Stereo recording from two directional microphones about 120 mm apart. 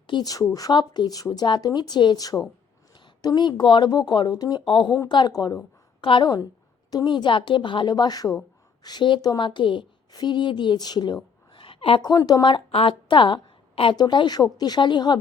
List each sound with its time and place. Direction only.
0.1 s a woman's voice: 35° left (ahead or behind)